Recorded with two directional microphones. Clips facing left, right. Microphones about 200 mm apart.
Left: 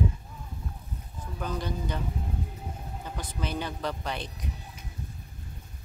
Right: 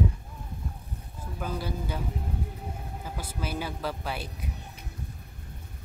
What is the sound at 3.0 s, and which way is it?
Speech, 5° right (ahead or behind).